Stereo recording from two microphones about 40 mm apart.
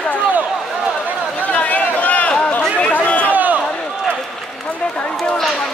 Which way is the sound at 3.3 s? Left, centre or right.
Right.